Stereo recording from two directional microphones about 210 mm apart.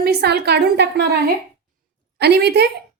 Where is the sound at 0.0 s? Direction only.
50° right (ahead or behind).